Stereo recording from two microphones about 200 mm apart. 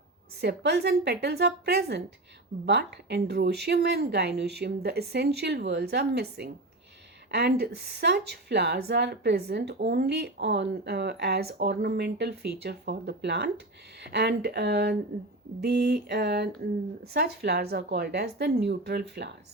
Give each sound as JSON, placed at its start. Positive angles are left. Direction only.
{"t": 0.4, "sound": "a woman's voice", "side_deg": -55}